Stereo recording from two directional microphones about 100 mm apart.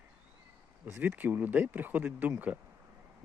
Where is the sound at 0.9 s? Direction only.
20° right (ahead or behind).